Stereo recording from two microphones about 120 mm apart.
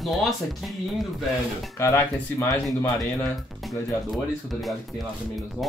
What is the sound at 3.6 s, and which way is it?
Speech, centre (ahead or behind).